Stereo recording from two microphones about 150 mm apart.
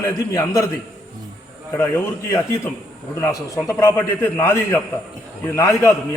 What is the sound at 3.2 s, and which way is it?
A man's voice, 20° left (ahead or behind).